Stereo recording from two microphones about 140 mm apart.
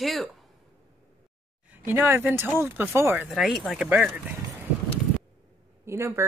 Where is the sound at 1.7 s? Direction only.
15° right (ahead or behind).